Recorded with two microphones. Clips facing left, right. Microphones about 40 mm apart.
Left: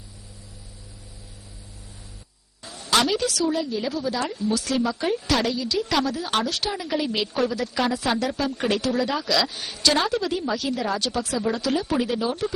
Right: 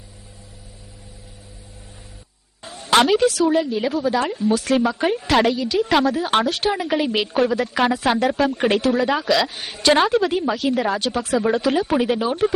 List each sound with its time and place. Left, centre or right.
2.6 s a woman's voice: right